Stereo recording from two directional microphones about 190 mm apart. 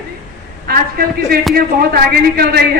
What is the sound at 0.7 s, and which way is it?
A woman's voice, 55° right (ahead or behind).